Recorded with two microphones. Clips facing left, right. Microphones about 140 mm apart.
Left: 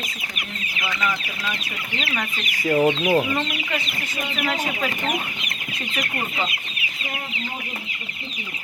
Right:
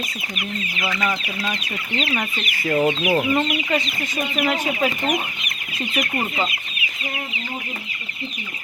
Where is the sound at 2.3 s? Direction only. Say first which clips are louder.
Left 2 dB; 15° left (ahead or behind).